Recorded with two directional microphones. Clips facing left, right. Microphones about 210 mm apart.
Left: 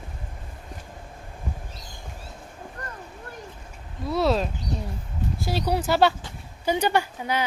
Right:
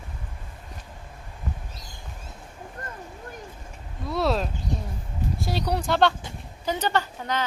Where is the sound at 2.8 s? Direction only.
25° right (ahead or behind).